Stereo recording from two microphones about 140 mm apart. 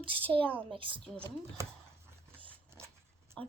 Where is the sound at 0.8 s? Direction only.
35° right (ahead or behind).